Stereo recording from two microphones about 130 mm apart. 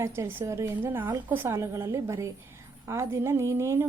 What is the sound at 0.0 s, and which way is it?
A woman's voice, 20° right (ahead or behind).